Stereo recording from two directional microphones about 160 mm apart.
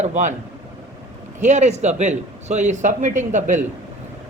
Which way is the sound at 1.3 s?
45° right (ahead or behind).